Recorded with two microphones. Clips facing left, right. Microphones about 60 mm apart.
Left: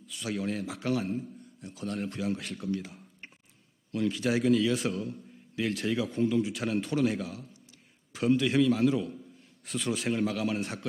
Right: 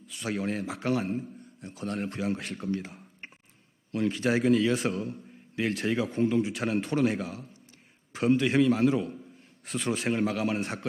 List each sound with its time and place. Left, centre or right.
0.1 s a man's voice: right
4.7 s a man's voice: right